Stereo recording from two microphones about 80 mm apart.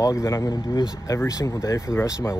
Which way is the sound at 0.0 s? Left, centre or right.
Left.